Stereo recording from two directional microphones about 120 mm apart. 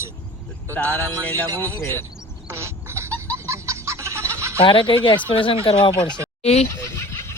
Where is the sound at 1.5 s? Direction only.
20° right (ahead or behind).